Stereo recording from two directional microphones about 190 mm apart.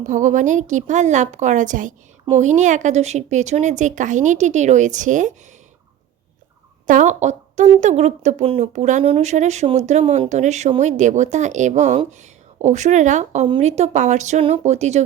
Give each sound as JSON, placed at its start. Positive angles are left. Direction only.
{"t": 0.0, "sound": "speech", "side_deg": -40}
{"t": 6.8, "sound": "speech", "side_deg": -40}